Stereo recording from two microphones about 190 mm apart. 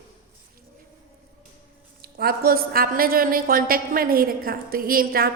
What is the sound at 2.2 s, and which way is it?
A woman's voice, 50° right (ahead or behind).